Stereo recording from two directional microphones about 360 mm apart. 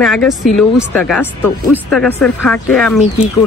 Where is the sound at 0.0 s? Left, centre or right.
Centre.